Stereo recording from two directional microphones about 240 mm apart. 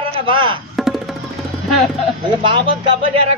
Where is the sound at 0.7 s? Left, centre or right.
Centre.